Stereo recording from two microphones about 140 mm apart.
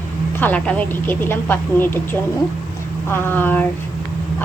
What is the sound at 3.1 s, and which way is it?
Speech, 15° left (ahead or behind).